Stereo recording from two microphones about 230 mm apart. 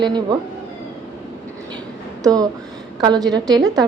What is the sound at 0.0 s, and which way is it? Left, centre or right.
Speech, centre.